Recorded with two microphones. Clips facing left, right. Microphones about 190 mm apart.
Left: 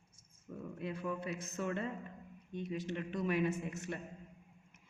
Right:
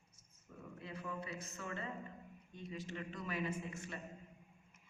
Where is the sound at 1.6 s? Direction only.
60° left (ahead or behind).